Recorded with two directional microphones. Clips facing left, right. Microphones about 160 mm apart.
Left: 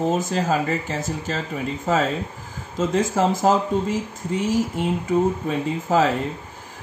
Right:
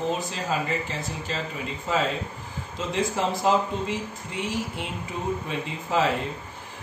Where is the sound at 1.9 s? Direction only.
45° left (ahead or behind).